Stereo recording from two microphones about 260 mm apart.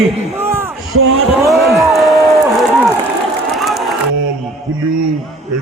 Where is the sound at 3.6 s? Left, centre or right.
Centre.